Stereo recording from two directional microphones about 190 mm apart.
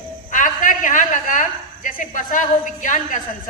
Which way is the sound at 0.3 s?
45° left (ahead or behind).